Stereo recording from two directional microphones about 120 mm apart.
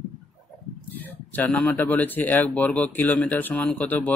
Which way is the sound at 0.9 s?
15° left (ahead or behind).